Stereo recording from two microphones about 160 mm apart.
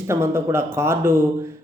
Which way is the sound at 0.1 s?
15° right (ahead or behind).